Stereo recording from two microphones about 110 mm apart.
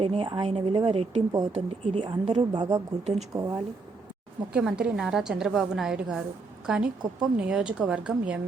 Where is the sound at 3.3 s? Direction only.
35° right (ahead or behind).